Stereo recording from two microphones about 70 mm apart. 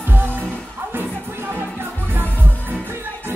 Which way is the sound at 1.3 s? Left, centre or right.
Right.